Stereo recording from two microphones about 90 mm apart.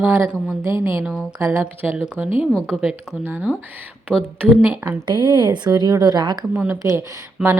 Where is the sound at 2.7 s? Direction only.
90° left.